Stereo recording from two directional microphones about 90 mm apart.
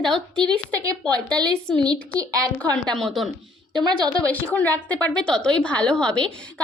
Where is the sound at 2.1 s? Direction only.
40° right (ahead or behind).